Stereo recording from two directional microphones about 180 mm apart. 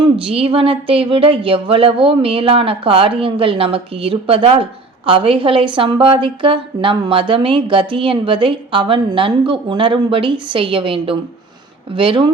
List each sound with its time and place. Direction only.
0.0 s speech: 35° right (ahead or behind)